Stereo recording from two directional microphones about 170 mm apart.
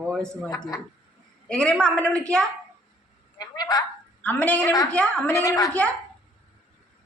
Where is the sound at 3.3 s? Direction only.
25° left (ahead or behind).